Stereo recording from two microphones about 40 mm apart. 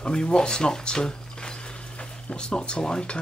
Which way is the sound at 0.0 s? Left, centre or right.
Left.